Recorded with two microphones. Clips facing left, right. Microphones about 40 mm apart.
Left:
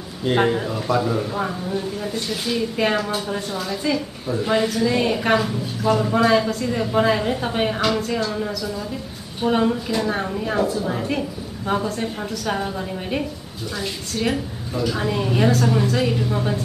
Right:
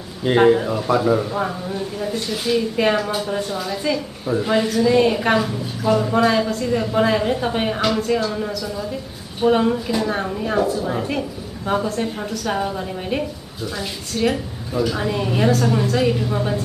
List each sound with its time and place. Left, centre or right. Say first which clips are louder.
0.2 s a woman's voice: right 5 dB; centre